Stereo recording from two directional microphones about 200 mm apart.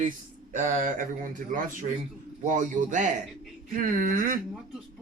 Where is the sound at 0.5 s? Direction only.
40° right (ahead or behind).